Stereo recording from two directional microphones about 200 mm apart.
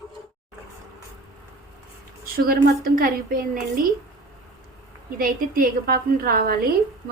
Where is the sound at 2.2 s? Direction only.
45° right (ahead or behind).